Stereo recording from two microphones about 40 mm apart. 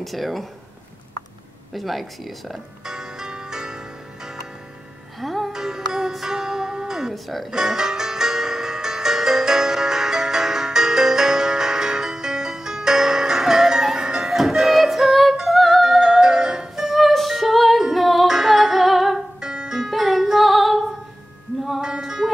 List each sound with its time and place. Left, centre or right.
0.0 s speech: centre
1.7 s speech: centre
2.8 s music: centre
5.2 s music: centre
5.5 s music: centre
7.2 s speech: centre
7.5 s music: centre
15.8 s music: centre
19.4 s music: centre
22.0 s music: centre